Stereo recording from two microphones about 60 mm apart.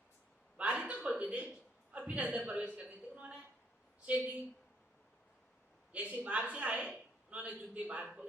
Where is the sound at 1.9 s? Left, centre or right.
Right.